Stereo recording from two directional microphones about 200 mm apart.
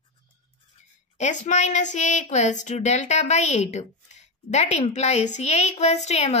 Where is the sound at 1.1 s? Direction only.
35° left (ahead or behind).